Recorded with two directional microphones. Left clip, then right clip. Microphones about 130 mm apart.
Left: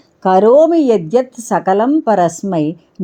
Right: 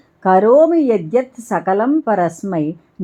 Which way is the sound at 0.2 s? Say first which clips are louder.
Left 2 dB; 25° left (ahead or behind).